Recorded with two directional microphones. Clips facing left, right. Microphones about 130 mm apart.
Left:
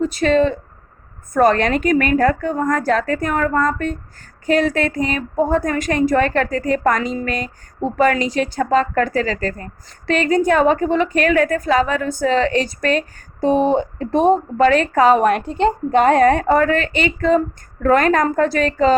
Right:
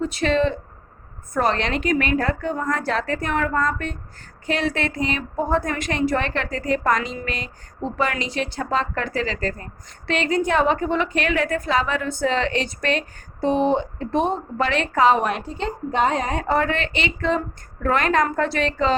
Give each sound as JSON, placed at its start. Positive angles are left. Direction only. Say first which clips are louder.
{"t": 0.0, "sound": "a woman's voice", "louder": "left 5 dB", "side_deg": 40}